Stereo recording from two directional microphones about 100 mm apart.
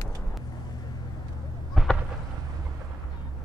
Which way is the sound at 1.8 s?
Centre (ahead or behind).